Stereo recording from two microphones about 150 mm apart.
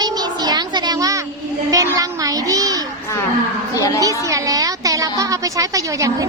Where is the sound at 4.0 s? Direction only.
25° right (ahead or behind).